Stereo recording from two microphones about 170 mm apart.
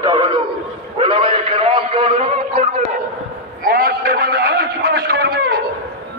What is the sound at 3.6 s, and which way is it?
A man's voice, 60° right (ahead or behind).